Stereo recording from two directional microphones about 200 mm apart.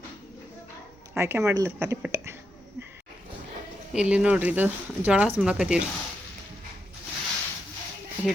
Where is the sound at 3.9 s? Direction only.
5° right (ahead or behind).